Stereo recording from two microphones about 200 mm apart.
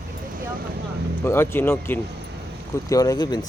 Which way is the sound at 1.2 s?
10° left (ahead or behind).